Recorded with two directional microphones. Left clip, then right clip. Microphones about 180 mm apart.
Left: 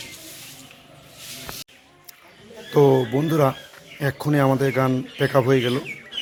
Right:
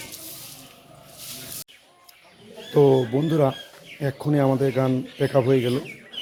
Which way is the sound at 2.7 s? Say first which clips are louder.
Left 1 dB; centre (ahead or behind).